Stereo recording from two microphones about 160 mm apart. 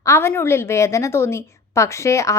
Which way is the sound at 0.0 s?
15° left (ahead or behind).